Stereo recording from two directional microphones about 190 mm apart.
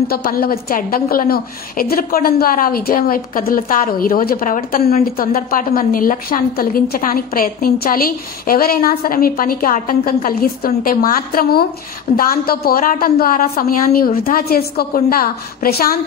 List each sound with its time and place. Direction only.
0.1 s a woman's voice: 50° left (ahead or behind)